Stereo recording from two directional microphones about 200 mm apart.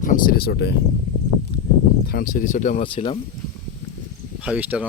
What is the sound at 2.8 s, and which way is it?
Speech, 25° left (ahead or behind).